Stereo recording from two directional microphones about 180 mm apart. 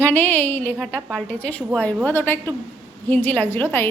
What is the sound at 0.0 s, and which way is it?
A woman's voice, 10° left (ahead or behind).